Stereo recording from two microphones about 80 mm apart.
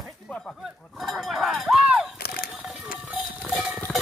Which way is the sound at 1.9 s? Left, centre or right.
Centre.